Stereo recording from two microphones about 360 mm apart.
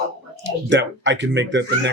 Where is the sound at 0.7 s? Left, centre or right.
Right.